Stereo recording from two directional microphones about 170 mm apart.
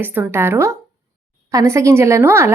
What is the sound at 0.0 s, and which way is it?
A woman's voice, 10° right (ahead or behind).